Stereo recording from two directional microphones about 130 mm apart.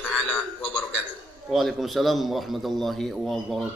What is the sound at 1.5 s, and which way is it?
A man's voice, centre (ahead or behind).